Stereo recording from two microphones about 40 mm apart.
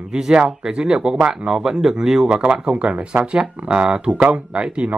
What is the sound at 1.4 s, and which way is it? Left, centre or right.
Speech, centre.